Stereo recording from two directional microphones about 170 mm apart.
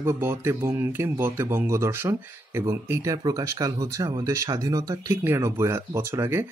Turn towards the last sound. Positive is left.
turn(degrees=-15)  # may be behind; listen again after turning